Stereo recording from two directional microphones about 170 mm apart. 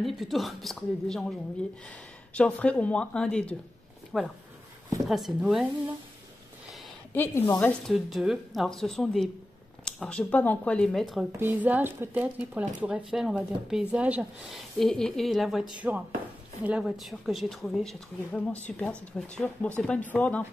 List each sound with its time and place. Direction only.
0.0 s speech: centre (ahead or behind)
7.1 s a woman's voice: 10° left (ahead or behind)
7.8 s speech: centre (ahead or behind)
11.3 s speech: 10° right (ahead or behind); by 20.4 s 10° left (ahead or behind)